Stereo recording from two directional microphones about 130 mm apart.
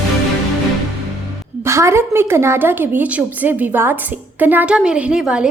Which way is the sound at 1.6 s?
20° right (ahead or behind).